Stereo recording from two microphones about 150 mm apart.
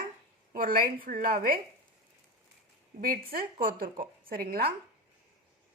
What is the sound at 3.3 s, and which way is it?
A woman's voice, 70° right (ahead or behind).